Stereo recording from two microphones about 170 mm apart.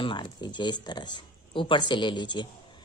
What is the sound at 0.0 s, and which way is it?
A woman's voice, 30° left (ahead or behind).